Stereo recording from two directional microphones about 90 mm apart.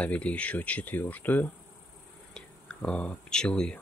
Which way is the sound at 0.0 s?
15° left (ahead or behind).